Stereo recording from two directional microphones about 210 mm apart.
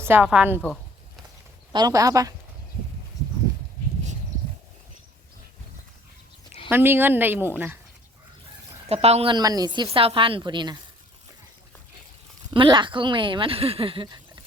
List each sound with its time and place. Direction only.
0.0 s speech: 10° right (ahead or behind)
1.7 s speech: 15° right (ahead or behind)
6.7 s speech: 10° right (ahead or behind)
8.9 s a woman's voice: 30° right (ahead or behind)
12.5 s a woman's voice: 20° right (ahead or behind)